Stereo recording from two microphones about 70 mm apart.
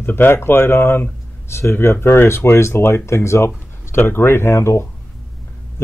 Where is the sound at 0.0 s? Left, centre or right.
Left.